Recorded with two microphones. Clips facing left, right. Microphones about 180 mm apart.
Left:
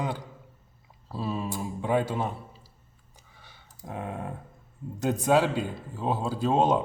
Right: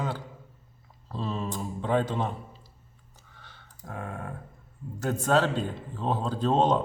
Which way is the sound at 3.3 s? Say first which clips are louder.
Right 1 dB; 10° left (ahead or behind).